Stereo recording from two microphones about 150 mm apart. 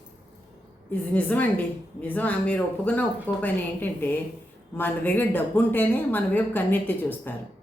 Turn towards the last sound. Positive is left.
turn(degrees=10)  # may be behind; listen again after turning